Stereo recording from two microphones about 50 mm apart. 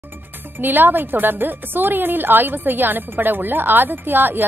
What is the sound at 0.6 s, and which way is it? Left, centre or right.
A woman's voice, right.